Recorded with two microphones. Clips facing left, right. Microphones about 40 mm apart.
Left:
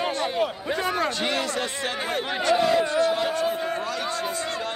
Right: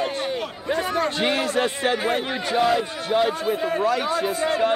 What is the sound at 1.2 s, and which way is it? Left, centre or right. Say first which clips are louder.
A man's voice: right 4 dB; right.